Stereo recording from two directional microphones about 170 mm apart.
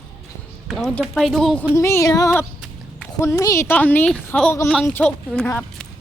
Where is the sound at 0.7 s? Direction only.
Centre (ahead or behind).